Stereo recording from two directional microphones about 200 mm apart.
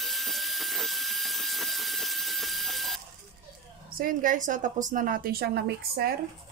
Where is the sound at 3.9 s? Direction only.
45° right (ahead or behind).